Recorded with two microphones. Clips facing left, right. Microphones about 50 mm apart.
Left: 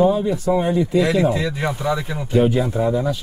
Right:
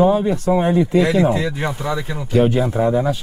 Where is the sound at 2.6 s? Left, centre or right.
Right.